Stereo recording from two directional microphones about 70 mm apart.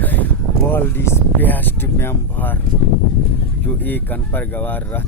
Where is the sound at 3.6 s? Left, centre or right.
Left.